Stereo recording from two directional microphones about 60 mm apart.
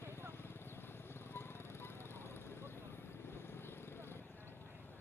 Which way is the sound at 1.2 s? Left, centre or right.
Left.